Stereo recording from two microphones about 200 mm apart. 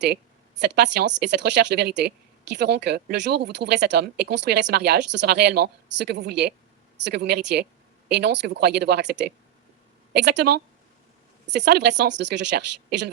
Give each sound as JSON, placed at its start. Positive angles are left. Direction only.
{"t": 0.0, "sound": "a woman's voice", "side_deg": -55}